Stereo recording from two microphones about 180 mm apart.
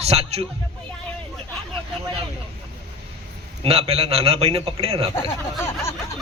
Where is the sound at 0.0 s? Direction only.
35° right (ahead or behind).